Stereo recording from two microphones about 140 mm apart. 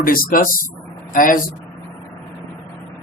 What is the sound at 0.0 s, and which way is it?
A man's voice, 90° left.